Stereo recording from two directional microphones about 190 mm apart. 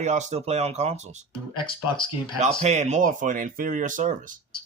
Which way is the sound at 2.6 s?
35° right (ahead or behind).